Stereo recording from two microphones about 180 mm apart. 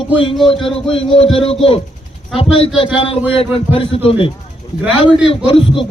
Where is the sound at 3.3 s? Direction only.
30° left (ahead or behind).